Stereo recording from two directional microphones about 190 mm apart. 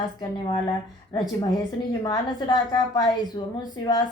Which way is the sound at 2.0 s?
20° left (ahead or behind).